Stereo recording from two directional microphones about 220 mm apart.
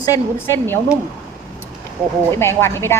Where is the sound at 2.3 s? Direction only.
10° left (ahead or behind).